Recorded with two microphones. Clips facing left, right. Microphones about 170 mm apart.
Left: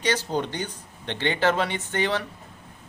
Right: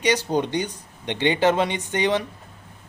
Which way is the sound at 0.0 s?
15° right (ahead or behind).